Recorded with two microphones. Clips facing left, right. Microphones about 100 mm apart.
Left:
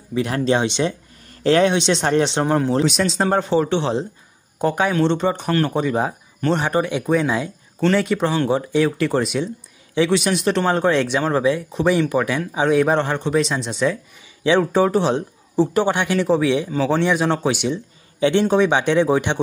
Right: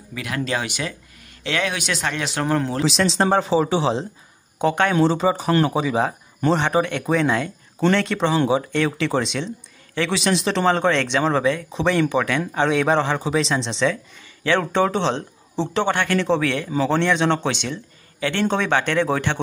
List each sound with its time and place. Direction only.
0.1 s speech: 30° left (ahead or behind)
1.4 s speech: 35° left (ahead or behind)
2.8 s speech: centre (ahead or behind)
14.4 s speech: 15° left (ahead or behind)